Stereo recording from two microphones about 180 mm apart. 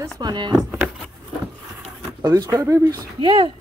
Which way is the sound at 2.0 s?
20° right (ahead or behind).